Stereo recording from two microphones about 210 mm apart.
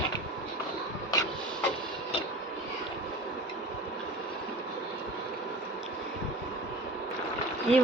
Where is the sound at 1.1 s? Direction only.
20° left (ahead or behind).